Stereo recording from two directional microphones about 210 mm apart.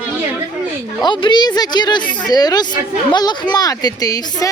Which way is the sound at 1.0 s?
20° left (ahead or behind).